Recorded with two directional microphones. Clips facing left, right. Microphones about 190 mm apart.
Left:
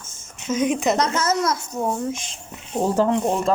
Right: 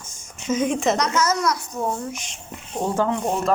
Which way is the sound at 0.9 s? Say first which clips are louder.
Left 1 dB; 30° left (ahead or behind).